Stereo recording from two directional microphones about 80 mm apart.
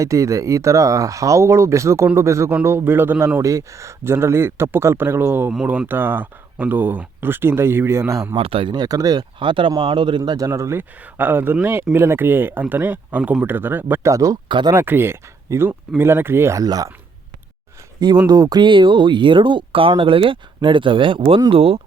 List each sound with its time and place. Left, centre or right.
0.0 s a man's voice: right
5.6 s speech: centre; by 8.4 s right
8.5 s speech: right
9.4 s speech: right
10.3 s a man's voice: right
11.0 s a man's voice: right
14.0 s speech: right
14.4 s speech: right
14.8 s a man's voice: right
16.6 s speech: right
18.3 s speech: right
18.6 s speech: right